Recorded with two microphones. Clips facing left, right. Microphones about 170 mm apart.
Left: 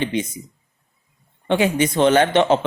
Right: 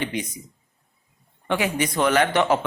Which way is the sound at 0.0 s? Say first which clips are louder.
Left 5 dB; 25° left (ahead or behind).